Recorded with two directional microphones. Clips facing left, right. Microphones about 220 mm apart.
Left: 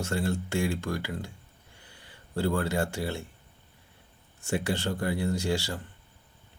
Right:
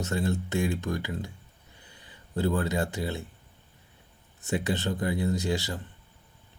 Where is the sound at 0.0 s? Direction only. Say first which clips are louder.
Right 1 dB; 20° right (ahead or behind).